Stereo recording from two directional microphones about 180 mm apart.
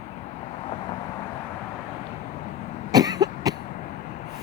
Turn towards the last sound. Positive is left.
turn(degrees=-20)  # may be behind; listen again after turning